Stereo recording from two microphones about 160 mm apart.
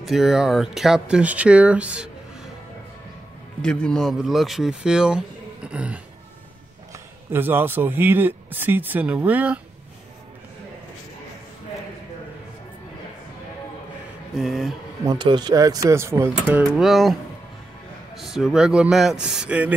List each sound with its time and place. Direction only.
0.0 s speech: centre (ahead or behind)
3.6 s speech: 5° left (ahead or behind)
7.3 s speech: 15° right (ahead or behind)
14.3 s speech: centre (ahead or behind)
15.0 s speech: 30° right (ahead or behind); by 19.7 s 5° right (ahead or behind)